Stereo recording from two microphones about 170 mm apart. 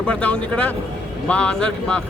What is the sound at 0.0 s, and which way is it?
A man's voice, 5° left (ahead or behind).